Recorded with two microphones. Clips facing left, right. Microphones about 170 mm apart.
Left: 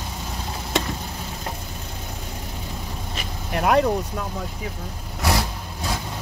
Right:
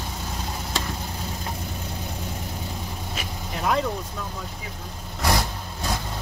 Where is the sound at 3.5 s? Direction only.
60° left (ahead or behind).